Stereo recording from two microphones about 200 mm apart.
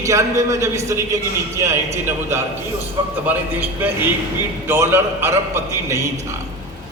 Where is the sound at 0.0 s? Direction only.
15° right (ahead or behind).